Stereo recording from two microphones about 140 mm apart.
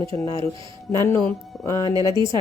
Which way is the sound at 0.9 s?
20° left (ahead or behind).